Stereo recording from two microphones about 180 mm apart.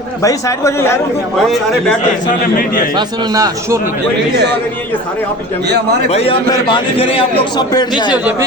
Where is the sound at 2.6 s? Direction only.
50° left (ahead or behind).